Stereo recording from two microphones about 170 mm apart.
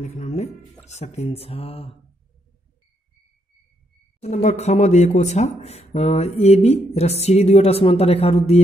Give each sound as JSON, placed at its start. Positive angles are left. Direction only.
{"t": 0.0, "sound": "speech", "side_deg": 40}
{"t": 4.2, "sound": "speech", "side_deg": 40}